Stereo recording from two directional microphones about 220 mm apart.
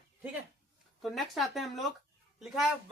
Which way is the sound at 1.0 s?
Centre (ahead or behind).